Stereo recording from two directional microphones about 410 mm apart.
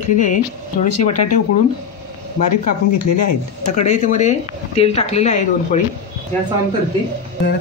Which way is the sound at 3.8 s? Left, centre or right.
Centre.